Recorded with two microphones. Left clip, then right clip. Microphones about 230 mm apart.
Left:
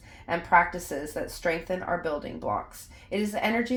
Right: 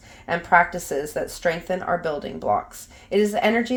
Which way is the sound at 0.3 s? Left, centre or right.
Right.